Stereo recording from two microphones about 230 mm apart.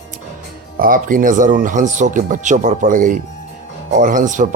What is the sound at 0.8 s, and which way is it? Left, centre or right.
Speech, right.